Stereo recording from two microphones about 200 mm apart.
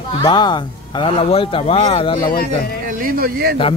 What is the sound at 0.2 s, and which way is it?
Speech, 20° left (ahead or behind).